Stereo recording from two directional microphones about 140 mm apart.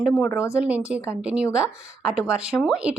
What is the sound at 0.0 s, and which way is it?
A woman's voice, centre (ahead or behind).